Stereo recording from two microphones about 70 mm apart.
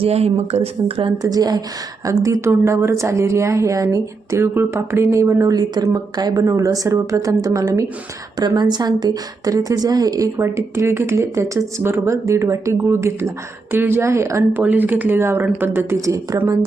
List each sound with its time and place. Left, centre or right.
1.2 s speech: right
2.0 s a woman's voice: right
4.4 s a woman's voice: right
5.5 s speech: right
6.4 s a woman's voice: right
8.4 s speech: right
10.3 s a woman's voice: right
14.6 s a woman's voice: right
16.0 s a woman's voice: right